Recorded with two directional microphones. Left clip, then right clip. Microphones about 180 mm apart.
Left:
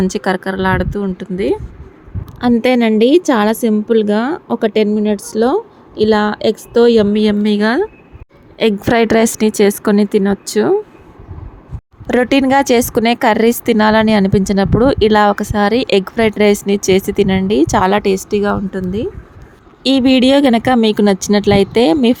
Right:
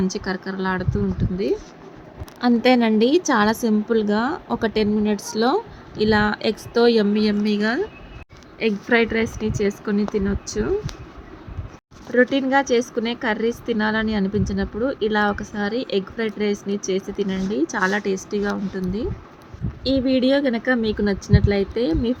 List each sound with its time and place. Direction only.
0.1 s a woman's voice: 40° left (ahead or behind)
8.5 s a woman's voice: 55° left (ahead or behind)
12.1 s speech: 60° left (ahead or behind); by 19.0 s 35° left (ahead or behind)
19.8 s speech: 60° left (ahead or behind)